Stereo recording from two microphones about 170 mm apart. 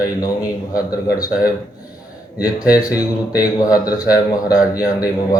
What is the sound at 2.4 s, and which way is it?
Speech, 20° left (ahead or behind).